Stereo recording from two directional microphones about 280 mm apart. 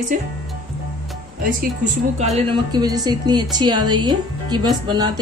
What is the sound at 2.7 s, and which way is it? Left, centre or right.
Speech, centre.